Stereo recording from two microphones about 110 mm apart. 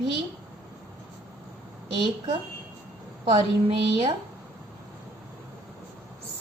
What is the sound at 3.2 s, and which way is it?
Speech, 50° right (ahead or behind).